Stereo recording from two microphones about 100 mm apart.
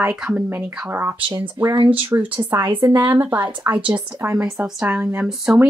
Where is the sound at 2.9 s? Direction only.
20° right (ahead or behind).